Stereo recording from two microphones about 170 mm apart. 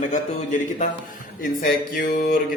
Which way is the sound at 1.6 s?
60° left (ahead or behind).